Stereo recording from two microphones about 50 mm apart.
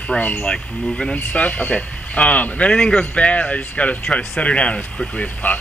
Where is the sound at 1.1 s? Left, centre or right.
Left.